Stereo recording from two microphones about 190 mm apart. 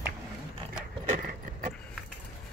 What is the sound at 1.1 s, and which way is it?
Keys jangling, 40° right (ahead or behind).